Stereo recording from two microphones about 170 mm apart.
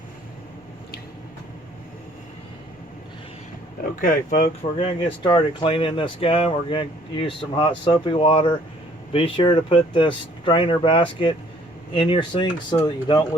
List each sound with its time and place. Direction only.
4.0 s speech: 50° left (ahead or behind); by 12.8 s 30° left (ahead or behind)